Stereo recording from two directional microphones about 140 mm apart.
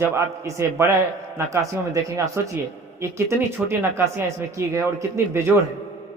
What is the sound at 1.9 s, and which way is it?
Speech, 20° right (ahead or behind).